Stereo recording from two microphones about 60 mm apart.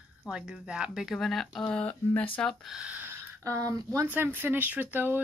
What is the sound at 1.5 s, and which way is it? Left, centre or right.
Speech, centre.